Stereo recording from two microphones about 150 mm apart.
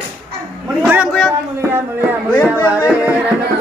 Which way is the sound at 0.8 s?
10° right (ahead or behind).